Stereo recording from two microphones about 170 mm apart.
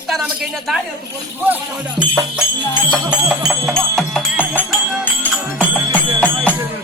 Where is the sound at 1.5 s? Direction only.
10° right (ahead or behind).